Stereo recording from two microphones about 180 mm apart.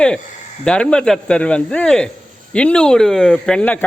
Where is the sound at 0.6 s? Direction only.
5° left (ahead or behind).